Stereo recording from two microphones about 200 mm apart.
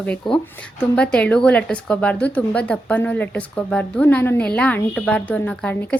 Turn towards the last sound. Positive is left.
turn(degrees=5)  # may be behind; listen again after turning